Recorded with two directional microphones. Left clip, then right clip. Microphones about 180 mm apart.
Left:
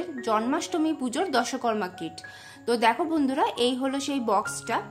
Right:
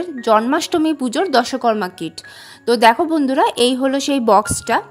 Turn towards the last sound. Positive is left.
turn(degrees=-45)  # may be behind; listen again after turning